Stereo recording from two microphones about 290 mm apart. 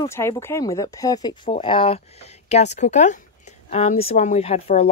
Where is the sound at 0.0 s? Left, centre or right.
Centre.